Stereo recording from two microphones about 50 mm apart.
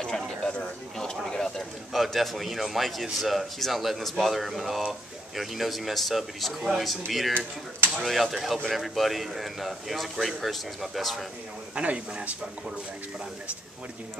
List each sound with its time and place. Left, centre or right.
0.0 s a sound: centre
1.9 s speech: centre
11.7 s speech: right